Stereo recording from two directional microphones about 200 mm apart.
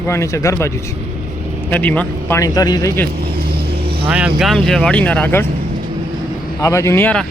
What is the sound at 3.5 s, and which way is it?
Vehicle, 50° right (ahead or behind).